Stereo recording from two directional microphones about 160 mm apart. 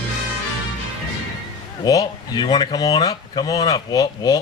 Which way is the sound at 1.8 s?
25° left (ahead or behind).